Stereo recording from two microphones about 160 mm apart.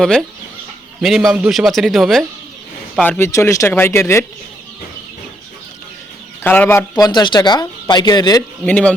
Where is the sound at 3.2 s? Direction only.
20° left (ahead or behind).